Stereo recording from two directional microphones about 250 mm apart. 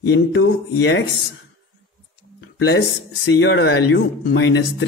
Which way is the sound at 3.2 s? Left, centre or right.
Left.